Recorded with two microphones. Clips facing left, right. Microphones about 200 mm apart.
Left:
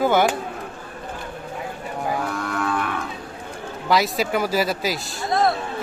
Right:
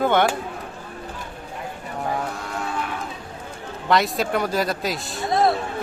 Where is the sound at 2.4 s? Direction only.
60° left (ahead or behind).